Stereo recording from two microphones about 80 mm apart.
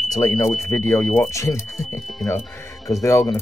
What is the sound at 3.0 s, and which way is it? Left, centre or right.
Speech, left.